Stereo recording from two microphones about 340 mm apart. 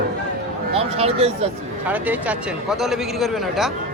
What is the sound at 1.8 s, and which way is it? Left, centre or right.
Speech, centre.